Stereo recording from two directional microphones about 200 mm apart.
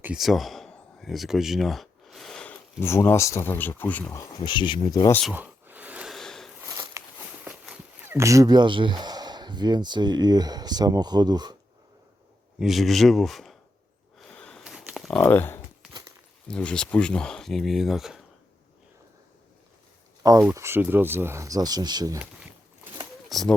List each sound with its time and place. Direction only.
0.0 s speech: 5° right (ahead or behind); by 5.2 s 15° left (ahead or behind)
5.3 s a sound: 10° right (ahead or behind)
6.6 s a sound: 15° right (ahead or behind)
7.4 s speech: 5° right (ahead or behind)
12.5 s speech: centre (ahead or behind)
14.2 s a sound: 5° left (ahead or behind)
16.5 s speech: 5° left (ahead or behind)
20.2 s speech: 15° right (ahead or behind)
23.3 s speech: centre (ahead or behind)